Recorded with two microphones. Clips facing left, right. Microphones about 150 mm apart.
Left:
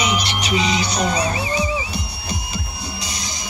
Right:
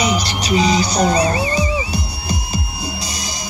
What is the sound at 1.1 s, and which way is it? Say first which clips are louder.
Speech: right 5 dB; 65° right (ahead or behind).